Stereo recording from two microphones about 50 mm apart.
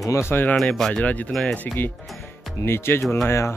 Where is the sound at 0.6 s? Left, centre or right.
Centre.